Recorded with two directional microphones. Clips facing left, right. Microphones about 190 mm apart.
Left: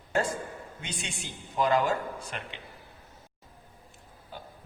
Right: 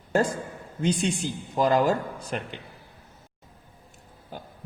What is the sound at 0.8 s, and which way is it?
Speech, 35° right (ahead or behind).